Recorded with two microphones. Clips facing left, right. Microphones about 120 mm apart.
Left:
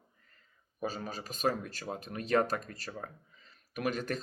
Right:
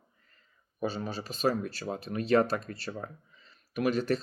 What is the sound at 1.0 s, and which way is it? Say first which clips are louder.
Speech: right 2 dB; 45° left (ahead or behind).